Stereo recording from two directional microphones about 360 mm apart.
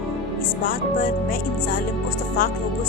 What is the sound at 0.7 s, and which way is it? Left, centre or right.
Speech, left.